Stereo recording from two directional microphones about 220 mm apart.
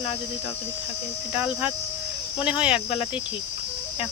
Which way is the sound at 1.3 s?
5° right (ahead or behind).